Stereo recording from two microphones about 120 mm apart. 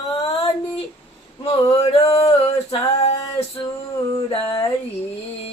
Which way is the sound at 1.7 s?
55° left (ahead or behind).